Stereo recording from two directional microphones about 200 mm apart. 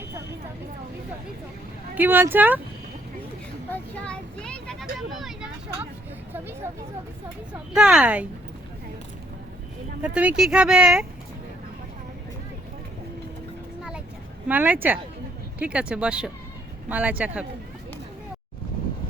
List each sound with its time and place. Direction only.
2.0 s speech: 10° right (ahead or behind)
3.7 s vehicle: 5° left (ahead or behind)
6.3 s a sound: 10° right (ahead or behind)
7.7 s speech: 5° right (ahead or behind)
10.2 s speech: 5° right (ahead or behind)
14.4 s speech: 10° right (ahead or behind)